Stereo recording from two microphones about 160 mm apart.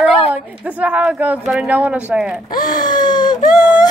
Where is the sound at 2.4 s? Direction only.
60° left (ahead or behind).